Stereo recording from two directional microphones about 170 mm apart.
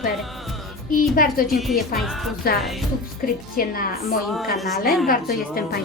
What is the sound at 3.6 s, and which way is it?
Speech, 60° left (ahead or behind).